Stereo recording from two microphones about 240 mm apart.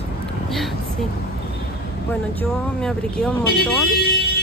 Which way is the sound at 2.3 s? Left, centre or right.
Centre.